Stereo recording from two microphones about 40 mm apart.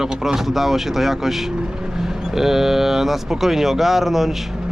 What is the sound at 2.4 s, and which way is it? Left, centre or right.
Speech, centre.